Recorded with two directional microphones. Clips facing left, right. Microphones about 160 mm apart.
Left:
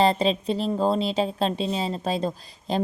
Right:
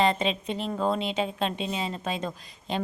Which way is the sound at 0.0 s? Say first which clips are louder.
Left 4 dB; 35° left (ahead or behind).